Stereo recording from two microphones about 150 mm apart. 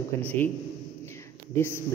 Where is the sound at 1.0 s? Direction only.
15° left (ahead or behind).